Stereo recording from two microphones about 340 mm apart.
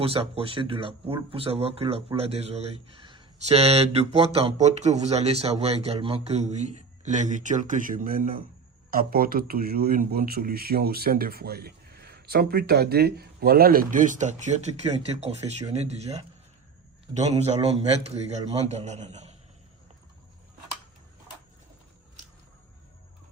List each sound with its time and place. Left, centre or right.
0.0 s speech: centre